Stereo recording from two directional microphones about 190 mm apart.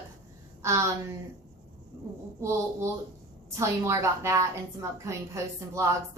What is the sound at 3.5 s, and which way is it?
A woman's voice, 15° right (ahead or behind).